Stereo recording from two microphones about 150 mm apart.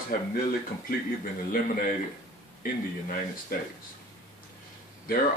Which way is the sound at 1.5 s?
65° left (ahead or behind).